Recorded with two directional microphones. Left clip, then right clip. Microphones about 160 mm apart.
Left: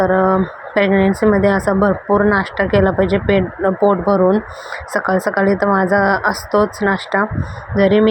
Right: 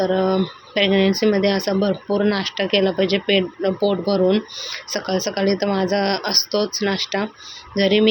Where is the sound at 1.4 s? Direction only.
10° left (ahead or behind).